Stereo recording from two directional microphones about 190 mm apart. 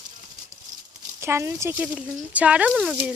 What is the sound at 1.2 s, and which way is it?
Speech, 15° right (ahead or behind).